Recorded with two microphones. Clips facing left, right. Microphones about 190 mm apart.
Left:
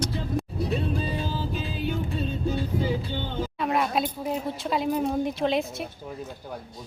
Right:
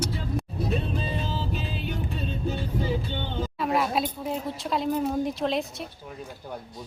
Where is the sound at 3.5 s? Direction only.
Centre (ahead or behind).